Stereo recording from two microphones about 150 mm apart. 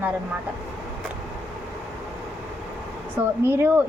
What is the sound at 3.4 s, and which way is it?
Speech, 15° right (ahead or behind).